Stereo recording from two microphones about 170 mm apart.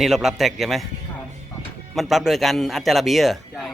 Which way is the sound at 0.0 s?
Centre (ahead or behind).